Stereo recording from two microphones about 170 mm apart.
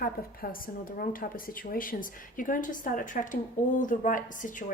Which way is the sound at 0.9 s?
55° left (ahead or behind).